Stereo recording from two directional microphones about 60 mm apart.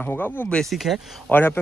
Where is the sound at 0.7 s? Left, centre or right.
Centre.